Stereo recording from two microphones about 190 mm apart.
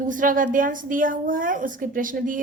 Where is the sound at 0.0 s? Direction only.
45° right (ahead or behind).